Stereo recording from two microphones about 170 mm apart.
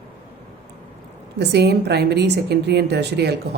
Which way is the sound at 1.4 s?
80° right.